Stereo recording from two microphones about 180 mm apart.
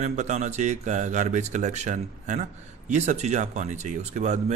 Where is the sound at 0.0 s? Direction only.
40° right (ahead or behind).